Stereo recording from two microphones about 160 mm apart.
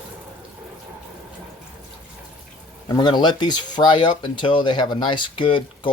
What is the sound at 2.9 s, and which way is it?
Speech, 25° left (ahead or behind).